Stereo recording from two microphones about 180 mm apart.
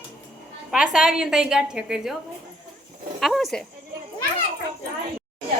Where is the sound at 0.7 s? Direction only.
5° right (ahead or behind).